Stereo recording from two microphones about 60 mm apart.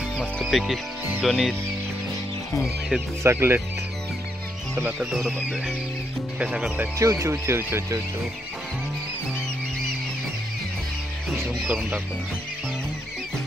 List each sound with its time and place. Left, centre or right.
0.4 s speech: centre
3.3 s speech: right
6.4 s speech: centre
7.0 s speech: right